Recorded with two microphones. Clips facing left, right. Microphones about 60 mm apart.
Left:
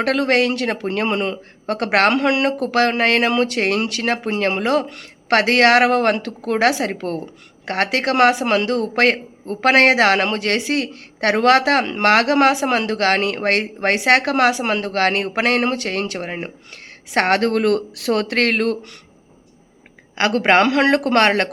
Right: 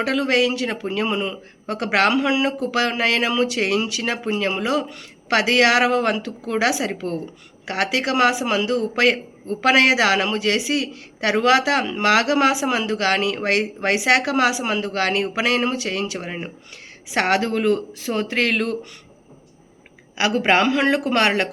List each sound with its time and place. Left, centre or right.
0.0 s speech: left
20.1 s speech: left